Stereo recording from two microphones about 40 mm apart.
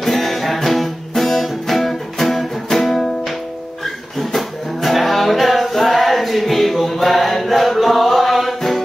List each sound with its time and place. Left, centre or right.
0.0 s music: centre